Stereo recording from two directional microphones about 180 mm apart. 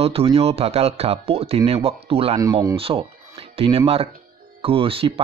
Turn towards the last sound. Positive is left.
turn(degrees=-30)  # may be behind; listen again after turning